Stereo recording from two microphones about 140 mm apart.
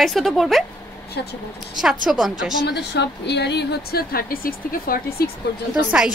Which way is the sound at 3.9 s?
90° left.